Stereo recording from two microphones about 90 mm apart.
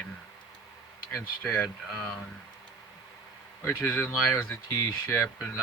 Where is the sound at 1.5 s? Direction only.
20° left (ahead or behind).